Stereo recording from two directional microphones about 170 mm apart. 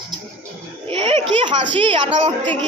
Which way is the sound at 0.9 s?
35° right (ahead or behind).